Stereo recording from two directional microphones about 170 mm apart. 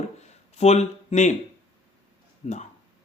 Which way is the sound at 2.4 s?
40° left (ahead or behind).